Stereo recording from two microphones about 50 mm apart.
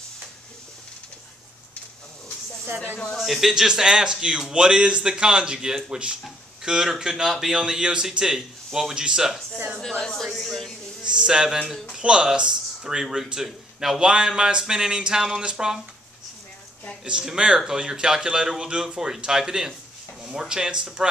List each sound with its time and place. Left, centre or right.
3.2 s speech: centre; by 6.1 s right
6.6 s speech: centre
9.8 s speech: centre
11.1 s speech: centre
17.0 s speech: centre